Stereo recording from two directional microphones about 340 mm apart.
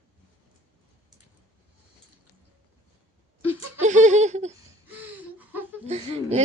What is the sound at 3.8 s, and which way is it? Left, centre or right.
Laughter, right.